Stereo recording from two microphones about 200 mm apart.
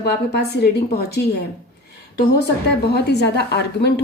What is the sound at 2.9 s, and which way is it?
A woman's voice, 55° left (ahead or behind).